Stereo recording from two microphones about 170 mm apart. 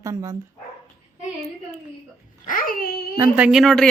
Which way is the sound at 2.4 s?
55° left (ahead or behind).